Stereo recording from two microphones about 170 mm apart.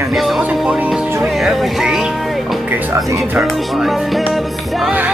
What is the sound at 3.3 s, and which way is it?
Music, centre (ahead or behind).